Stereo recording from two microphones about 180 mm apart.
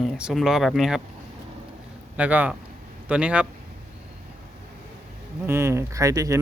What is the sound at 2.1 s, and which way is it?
Speech, 10° right (ahead or behind).